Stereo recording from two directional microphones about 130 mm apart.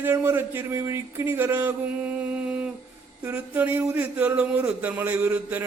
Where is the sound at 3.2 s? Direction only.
15° right (ahead or behind).